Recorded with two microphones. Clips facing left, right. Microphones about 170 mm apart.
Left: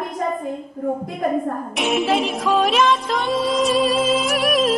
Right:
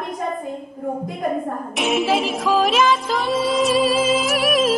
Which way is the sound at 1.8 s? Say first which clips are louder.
Even; centre (ahead or behind).